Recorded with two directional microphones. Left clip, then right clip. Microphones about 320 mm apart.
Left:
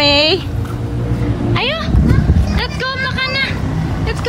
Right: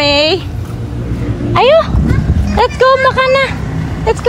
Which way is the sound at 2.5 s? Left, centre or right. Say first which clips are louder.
Right 13 dB; centre.